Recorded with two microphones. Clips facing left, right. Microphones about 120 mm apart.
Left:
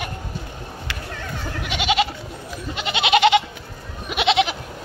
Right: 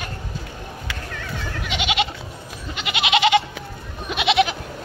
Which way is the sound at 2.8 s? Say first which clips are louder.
Left 2 dB; 30° left (ahead or behind).